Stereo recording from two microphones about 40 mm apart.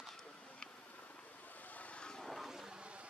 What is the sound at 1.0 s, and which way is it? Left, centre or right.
Vehicle, left.